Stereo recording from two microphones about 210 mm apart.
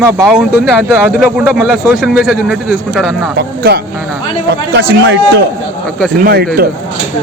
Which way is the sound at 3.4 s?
50° right (ahead or behind).